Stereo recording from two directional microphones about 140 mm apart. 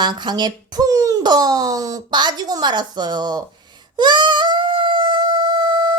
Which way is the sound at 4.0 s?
30° right (ahead or behind).